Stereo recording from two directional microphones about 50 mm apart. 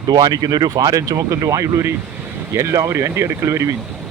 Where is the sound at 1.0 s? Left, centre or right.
Right.